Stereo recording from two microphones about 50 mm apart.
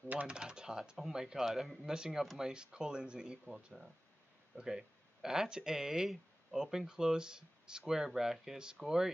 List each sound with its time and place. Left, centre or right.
0.3 s speech: centre
3.4 s speech: centre